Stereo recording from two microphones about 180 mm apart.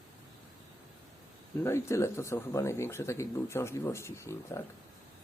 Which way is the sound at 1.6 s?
15° left (ahead or behind).